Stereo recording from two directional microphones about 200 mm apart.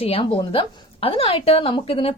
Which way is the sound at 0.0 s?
30° left (ahead or behind).